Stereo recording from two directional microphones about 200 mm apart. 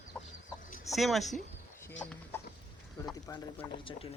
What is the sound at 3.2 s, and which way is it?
Speech, 15° left (ahead or behind).